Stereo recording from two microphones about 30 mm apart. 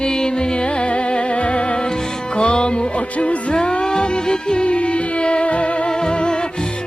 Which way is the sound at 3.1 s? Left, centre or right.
Left.